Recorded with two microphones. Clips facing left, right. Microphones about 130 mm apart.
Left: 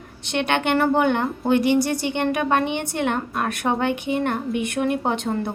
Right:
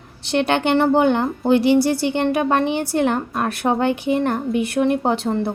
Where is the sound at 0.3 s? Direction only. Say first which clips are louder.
Right 4 dB; 35° right (ahead or behind).